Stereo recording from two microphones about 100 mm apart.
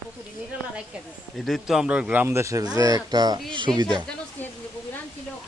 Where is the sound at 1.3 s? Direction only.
Centre (ahead or behind); by 2.3 s 15° right (ahead or behind).